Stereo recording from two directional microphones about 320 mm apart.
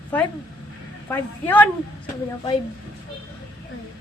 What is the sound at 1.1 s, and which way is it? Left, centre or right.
Speech, centre.